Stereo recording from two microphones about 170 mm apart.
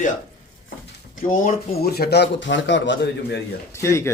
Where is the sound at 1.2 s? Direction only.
50° left (ahead or behind); by 3.4 s 90° left.